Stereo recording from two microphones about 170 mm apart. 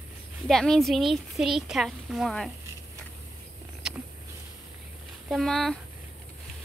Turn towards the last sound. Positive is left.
turn(degrees=5)  # may be behind; listen again after turning